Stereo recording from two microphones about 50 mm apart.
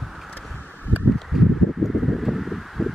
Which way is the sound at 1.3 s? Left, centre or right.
Centre.